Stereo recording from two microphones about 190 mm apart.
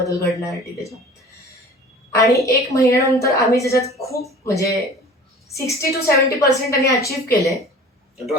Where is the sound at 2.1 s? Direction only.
15° left (ahead or behind).